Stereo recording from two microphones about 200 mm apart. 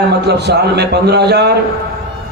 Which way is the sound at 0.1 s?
55° right (ahead or behind).